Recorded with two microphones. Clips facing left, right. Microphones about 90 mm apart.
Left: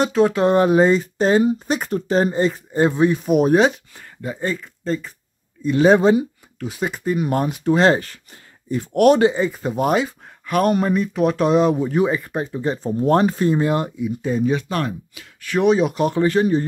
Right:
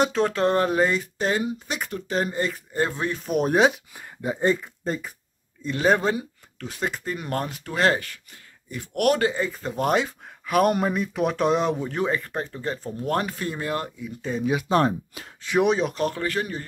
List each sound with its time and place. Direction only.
0.0 s speech: 5° left (ahead or behind)
3.9 s speech: 15° right (ahead or behind)
5.6 s speech: 5° left (ahead or behind)
5.9 s speech: 20° left (ahead or behind)
6.6 s speech: 10° left (ahead or behind)
14.7 s speech: 30° right (ahead or behind)
15.6 s speech: centre (ahead or behind)
15.9 s speech: 15° left (ahead or behind)